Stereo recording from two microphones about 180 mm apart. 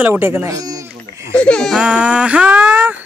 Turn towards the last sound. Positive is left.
turn(degrees=-10)  # may be behind; listen again after turning